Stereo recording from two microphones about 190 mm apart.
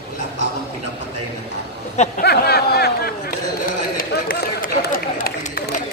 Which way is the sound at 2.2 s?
60° left (ahead or behind).